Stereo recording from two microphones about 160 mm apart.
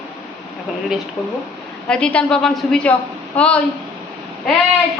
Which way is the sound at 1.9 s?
5° left (ahead or behind).